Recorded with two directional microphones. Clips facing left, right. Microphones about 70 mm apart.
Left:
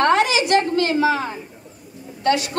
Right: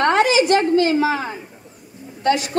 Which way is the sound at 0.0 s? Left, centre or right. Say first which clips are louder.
Right 1 dB; right.